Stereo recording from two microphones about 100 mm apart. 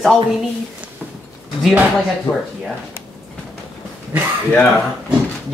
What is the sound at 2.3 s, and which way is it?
Speech, 50° left (ahead or behind).